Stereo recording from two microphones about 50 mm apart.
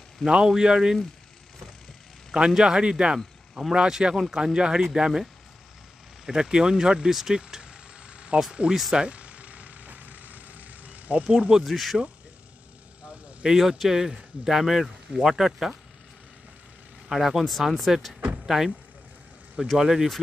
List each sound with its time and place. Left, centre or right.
0.3 s speech: centre
2.3 s speech: centre
6.2 s speech: centre
7.3 s vehicle: centre
8.6 s speech: right
8.9 s vehicle: right
11.2 s speech: centre
11.6 s speech: centre
13.5 s speech: centre
17.1 s speech: centre
18.4 s vehicle: centre
19.8 s speech: centre